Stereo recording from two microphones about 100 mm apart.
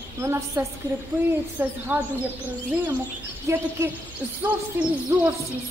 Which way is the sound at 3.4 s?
25° right (ahead or behind).